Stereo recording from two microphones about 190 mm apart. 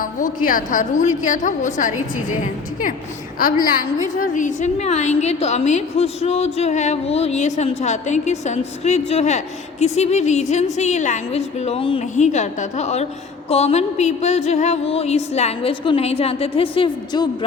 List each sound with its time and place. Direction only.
0.0 s a woman's voice: 45° left (ahead or behind)
3.3 s a woman's voice: 45° left (ahead or behind); by 17.2 s 25° left (ahead or behind)